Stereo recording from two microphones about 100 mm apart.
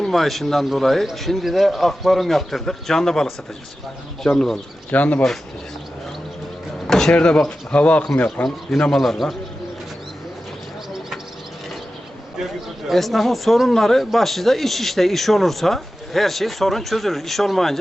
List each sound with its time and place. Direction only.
0.0 s a man's voice: centre (ahead or behind)
4.9 s speech: 15° left (ahead or behind)
6.8 s speech: 5° left (ahead or behind)
8.4 s a man's voice: 5° left (ahead or behind)
12.9 s a man's voice: centre (ahead or behind)